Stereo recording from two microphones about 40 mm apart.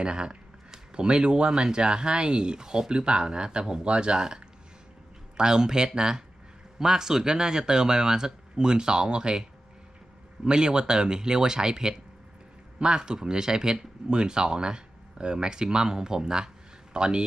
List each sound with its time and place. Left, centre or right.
0.0 s speech: right